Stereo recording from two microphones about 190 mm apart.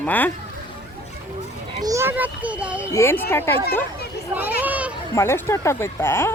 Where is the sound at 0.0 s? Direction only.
10° left (ahead or behind).